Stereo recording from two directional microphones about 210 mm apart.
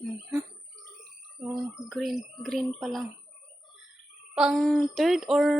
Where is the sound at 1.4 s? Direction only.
Centre (ahead or behind).